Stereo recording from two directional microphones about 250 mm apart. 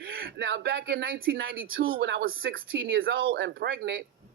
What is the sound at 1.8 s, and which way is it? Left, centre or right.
A man's voice, right.